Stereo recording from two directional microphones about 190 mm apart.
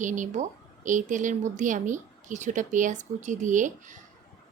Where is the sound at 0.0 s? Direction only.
40° right (ahead or behind).